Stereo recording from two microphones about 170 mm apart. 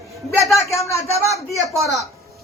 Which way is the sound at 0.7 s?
15° left (ahead or behind).